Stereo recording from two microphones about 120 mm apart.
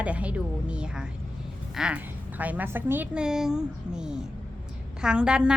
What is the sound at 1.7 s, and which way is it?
A woman's voice, 10° right (ahead or behind).